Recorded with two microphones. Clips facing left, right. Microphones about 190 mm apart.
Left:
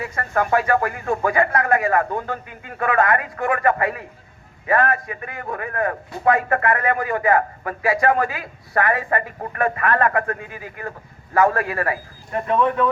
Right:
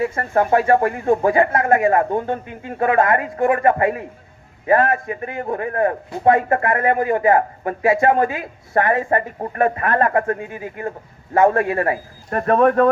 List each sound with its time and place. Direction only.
0.0 s speech: 25° right (ahead or behind)
12.3 s speech: 50° right (ahead or behind)